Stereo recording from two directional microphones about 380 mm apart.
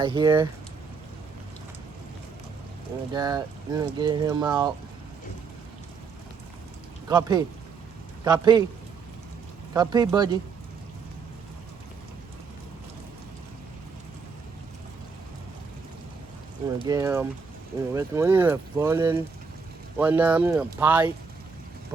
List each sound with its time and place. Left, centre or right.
0.0 s speech: centre
3.1 s speech: centre
7.1 s speech: centre
9.7 s speech: centre
16.7 s speech: centre